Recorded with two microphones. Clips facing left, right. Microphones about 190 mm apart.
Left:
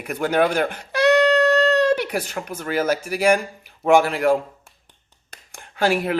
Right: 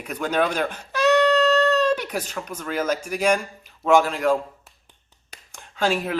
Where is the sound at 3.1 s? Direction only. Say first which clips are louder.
Left 3 dB; 60° left (ahead or behind).